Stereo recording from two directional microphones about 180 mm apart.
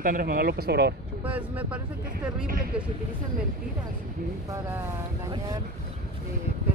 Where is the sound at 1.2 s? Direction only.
10° right (ahead or behind).